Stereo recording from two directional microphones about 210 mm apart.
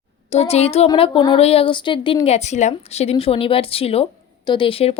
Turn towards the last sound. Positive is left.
turn(degrees=25)  # may be behind; listen again after turning